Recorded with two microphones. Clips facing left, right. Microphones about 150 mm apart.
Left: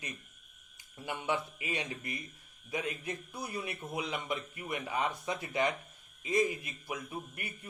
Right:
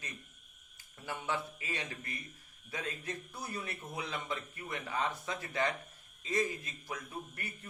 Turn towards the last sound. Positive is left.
turn(degrees=15)  # may be behind; listen again after turning